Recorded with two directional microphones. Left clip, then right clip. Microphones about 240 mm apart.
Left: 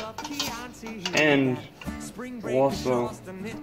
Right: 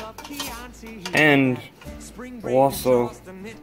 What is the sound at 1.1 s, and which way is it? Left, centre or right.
Speech, right.